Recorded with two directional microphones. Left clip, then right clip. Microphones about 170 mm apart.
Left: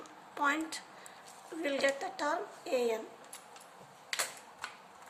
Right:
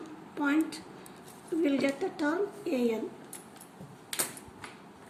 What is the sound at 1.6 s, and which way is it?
A woman's voice, 35° left (ahead or behind).